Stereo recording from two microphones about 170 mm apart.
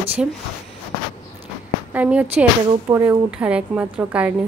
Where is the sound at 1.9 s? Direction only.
10° right (ahead or behind).